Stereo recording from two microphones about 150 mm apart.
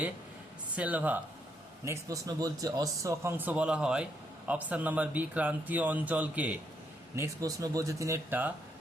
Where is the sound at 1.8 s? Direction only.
25° right (ahead or behind).